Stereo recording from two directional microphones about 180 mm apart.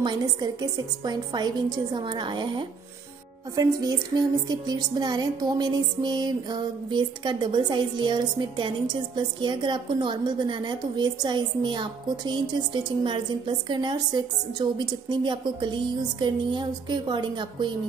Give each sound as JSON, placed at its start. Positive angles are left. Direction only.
{"t": 0.0, "sound": "music", "side_deg": -20}